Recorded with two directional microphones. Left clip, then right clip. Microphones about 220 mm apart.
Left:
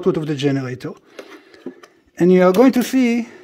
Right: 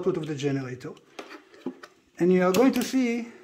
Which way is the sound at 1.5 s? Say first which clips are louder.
Left 3 dB; 35° left (ahead or behind).